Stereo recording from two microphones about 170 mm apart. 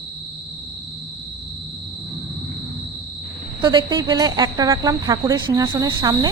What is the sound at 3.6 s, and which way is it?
Speech, 25° right (ahead or behind).